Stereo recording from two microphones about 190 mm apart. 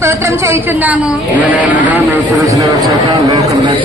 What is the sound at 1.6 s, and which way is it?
Speech, 45° left (ahead or behind).